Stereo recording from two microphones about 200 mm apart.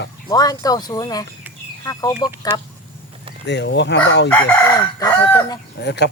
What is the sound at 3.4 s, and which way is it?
Speech, 60° left (ahead or behind).